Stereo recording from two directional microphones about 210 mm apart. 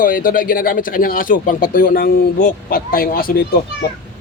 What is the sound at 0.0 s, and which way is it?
Speech, 40° left (ahead or behind).